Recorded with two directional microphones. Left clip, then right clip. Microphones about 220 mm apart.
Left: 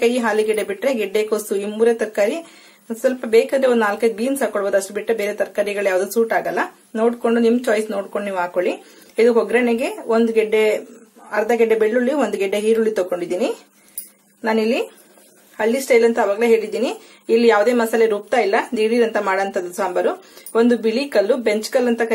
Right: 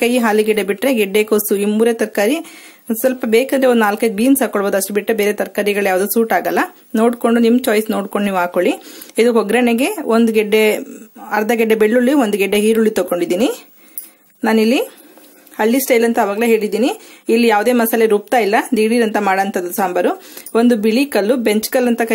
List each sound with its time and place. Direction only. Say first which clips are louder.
0.0 s speech: right 3 dB; 40° right (ahead or behind)